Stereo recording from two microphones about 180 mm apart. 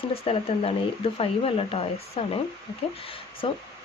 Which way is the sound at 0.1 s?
30° left (ahead or behind).